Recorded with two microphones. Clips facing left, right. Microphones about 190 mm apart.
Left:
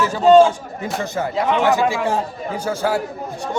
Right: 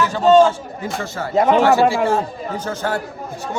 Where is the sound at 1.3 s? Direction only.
40° right (ahead or behind).